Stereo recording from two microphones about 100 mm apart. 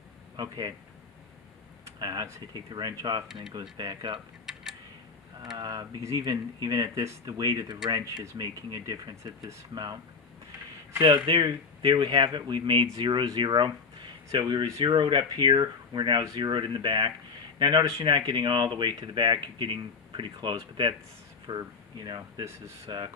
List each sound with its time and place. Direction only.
0.4 s speech: 40° right (ahead or behind)
2.0 s speech: 45° right (ahead or behind)
5.5 s speech: 45° right (ahead or behind)
6.0 s speech: 35° right (ahead or behind)
11.3 s speech: 55° right (ahead or behind)